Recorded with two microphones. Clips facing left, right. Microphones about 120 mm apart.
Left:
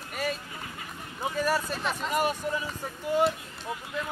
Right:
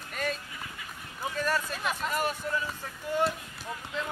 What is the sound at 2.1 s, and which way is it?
Speech, 15° left (ahead or behind).